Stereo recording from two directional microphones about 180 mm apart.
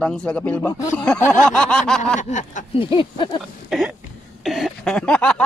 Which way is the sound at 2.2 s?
45° left (ahead or behind).